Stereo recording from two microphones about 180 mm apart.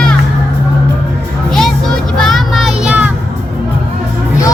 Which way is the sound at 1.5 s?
Centre (ahead or behind).